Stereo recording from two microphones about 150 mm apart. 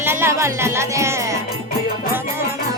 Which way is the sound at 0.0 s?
15° right (ahead or behind).